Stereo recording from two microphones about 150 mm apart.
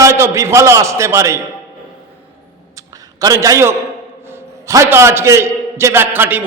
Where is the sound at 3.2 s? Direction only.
20° right (ahead or behind).